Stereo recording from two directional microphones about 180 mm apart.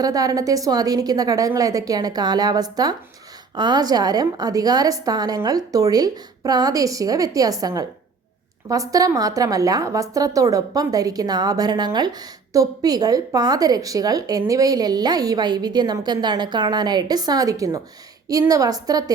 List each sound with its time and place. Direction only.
0.0 s a woman's voice: 20° right (ahead or behind)